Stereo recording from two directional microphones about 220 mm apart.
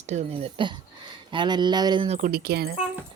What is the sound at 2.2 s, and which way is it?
Speech, 45° right (ahead or behind).